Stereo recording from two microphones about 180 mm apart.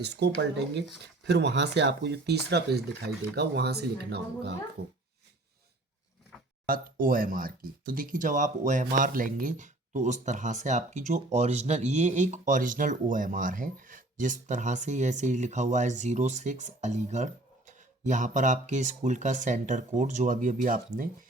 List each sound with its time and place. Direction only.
0.0 s speech: 70° right (ahead or behind)
6.7 s speech: 50° right (ahead or behind)